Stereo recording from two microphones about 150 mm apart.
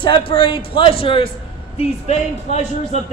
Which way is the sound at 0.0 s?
35° left (ahead or behind).